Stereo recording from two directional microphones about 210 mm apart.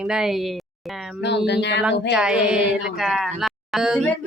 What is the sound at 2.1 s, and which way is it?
Speech, 5° right (ahead or behind).